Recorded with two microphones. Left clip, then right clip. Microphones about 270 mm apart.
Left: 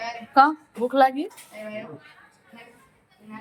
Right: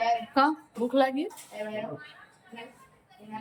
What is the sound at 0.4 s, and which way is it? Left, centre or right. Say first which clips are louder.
Speech: left 12 dB; centre.